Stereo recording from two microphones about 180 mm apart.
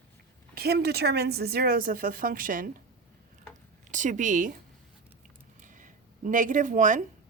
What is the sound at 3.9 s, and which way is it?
Speech, 45° right (ahead or behind).